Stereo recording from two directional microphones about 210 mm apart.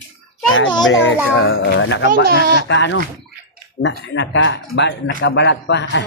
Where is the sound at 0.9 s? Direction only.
65° left (ahead or behind).